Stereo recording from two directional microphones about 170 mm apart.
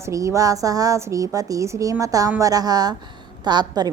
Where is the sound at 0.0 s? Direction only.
20° right (ahead or behind).